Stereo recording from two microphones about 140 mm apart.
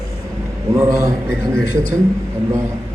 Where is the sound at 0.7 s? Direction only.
20° right (ahead or behind).